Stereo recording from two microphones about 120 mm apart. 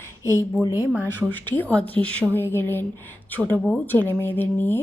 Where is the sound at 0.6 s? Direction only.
30° left (ahead or behind).